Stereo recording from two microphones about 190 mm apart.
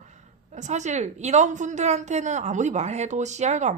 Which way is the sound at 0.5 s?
40° right (ahead or behind).